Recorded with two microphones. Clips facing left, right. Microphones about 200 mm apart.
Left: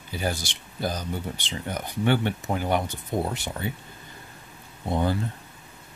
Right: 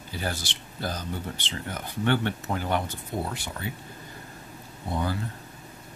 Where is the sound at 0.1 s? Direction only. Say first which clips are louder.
Left 4 dB; 15° left (ahead or behind).